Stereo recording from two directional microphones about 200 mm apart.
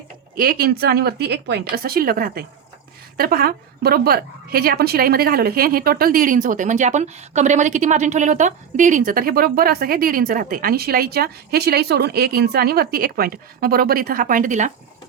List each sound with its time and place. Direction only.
0.3 s a woman's voice: 45° right (ahead or behind)